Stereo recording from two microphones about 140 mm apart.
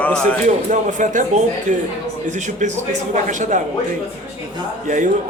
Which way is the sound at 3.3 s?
65° right (ahead or behind).